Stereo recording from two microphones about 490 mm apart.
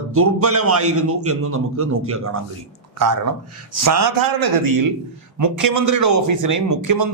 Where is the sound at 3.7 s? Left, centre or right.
Right.